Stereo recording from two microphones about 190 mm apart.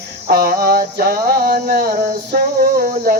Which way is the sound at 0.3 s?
50° right (ahead or behind).